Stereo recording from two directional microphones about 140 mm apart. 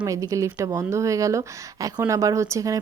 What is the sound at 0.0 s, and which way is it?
Speech, 25° right (ahead or behind).